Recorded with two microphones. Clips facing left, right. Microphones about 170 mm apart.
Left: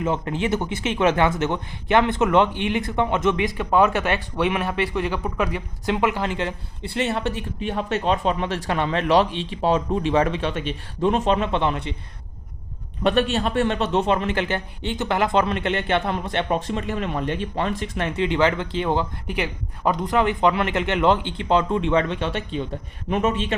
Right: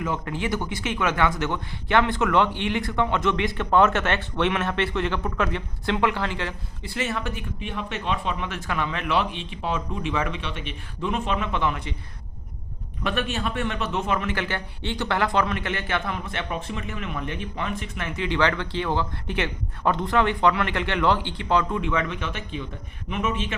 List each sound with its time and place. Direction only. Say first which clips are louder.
0.0 s speech: left 4 dB; 25° left (ahead or behind)
6.9 s speech: left 5 dB; 30° left (ahead or behind)
13.0 s a man's voice: left 7 dB; 30° left (ahead or behind)
18.3 s speech: even; 20° left (ahead or behind); by 23.6 s 35° left (ahead or behind)